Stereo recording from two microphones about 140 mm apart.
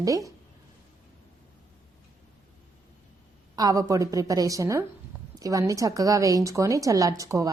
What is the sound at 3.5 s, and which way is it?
A woman's voice, 25° right (ahead or behind).